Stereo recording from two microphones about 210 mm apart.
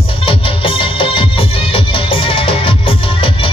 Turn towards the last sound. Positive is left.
turn(degrees=25)  # may be behind; listen again after turning